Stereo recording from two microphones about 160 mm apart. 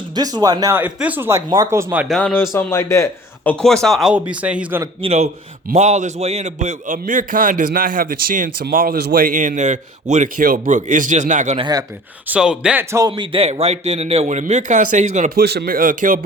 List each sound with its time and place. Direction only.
0.1 s speech: 25° right (ahead or behind)
0.8 s speech: 10° right (ahead or behind)
2.0 s speech: 5° left (ahead or behind)
2.5 s speech: 15° left (ahead or behind)
3.6 s speech: 5° left (ahead or behind)
4.9 s a man's voice: 40° right (ahead or behind)
11.5 s speech: 25° right (ahead or behind)
12.3 s speech: 5° right (ahead or behind)
12.9 s a man's voice: 25° right (ahead or behind); by 15.3 s 50° right (ahead or behind)
15.4 s a man's voice: 65° right (ahead or behind)